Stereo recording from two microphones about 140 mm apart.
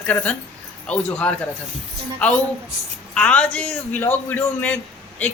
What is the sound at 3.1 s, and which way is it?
A man's voice, 10° left (ahead or behind).